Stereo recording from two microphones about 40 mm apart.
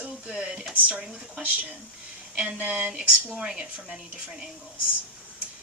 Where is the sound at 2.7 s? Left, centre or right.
Right.